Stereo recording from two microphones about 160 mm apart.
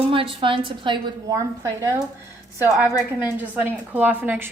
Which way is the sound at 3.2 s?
10° right (ahead or behind).